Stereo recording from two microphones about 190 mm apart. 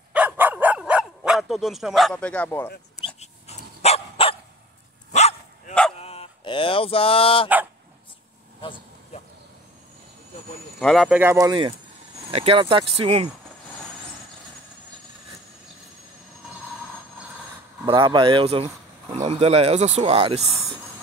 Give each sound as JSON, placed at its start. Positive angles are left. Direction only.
{"t": 0.1, "sound": "dog", "side_deg": -10}
{"t": 3.2, "sound": "dog", "side_deg": 35}
{"t": 8.5, "sound": "vehicle", "side_deg": 30}
{"t": 10.8, "sound": "speech", "side_deg": 0}
{"t": 11.1, "sound": "speech", "side_deg": -15}
{"t": 12.3, "sound": "speech", "side_deg": -30}
{"t": 17.8, "sound": "speech", "side_deg": -25}